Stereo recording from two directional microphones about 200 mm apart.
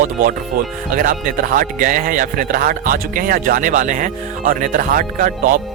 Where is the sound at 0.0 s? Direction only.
45° right (ahead or behind).